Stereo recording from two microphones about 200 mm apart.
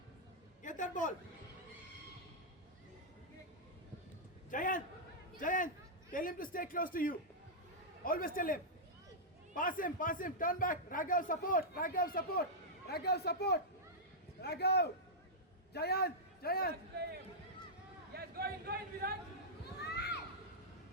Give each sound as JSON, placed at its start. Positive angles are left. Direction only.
{"t": 0.6, "sound": "a sound", "side_deg": 40}
{"t": 4.5, "sound": "a man's voice", "side_deg": 40}
{"t": 18.1, "sound": "chatter", "side_deg": -50}